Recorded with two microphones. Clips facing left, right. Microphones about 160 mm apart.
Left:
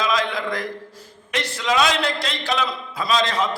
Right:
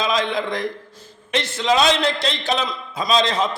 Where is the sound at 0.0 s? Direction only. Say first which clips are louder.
Right 1 dB; 25° right (ahead or behind).